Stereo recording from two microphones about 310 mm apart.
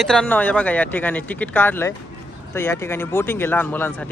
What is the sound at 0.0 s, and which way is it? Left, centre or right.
Speech, centre.